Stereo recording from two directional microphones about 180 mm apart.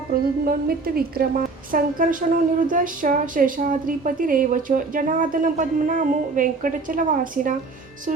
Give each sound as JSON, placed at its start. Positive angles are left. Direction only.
{"t": 0.1, "sound": "a woman's voice", "side_deg": -55}